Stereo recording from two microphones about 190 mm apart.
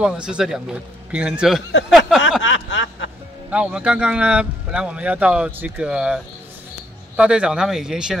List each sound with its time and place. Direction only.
0.0 s a man's voice: 5° right (ahead or behind)
1.9 s a sound: centre (ahead or behind)
2.4 s snicker: 75° left (ahead or behind)
3.4 s a man's voice: 5° right (ahead or behind)